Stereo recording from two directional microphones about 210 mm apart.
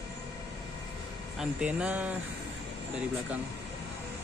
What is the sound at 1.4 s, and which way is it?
Speech, 5° right (ahead or behind).